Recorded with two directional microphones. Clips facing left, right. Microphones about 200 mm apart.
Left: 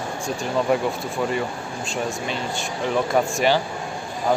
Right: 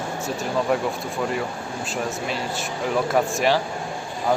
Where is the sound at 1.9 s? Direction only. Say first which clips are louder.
Left 1 dB; 5° right (ahead or behind).